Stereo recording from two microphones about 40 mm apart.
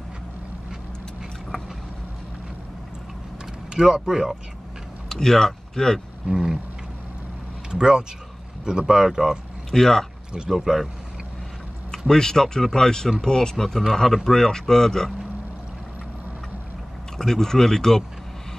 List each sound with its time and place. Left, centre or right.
3.7 s speech: centre
5.1 s speech: centre
6.2 s speech: centre
7.7 s speech: centre
9.7 s speech: centre
10.5 s speech: centre
12.1 s speech: centre
17.2 s speech: centre